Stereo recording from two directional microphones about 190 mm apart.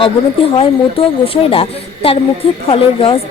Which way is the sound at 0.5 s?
30° left (ahead or behind).